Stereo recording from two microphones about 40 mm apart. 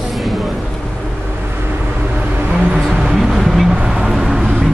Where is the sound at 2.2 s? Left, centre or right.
Right.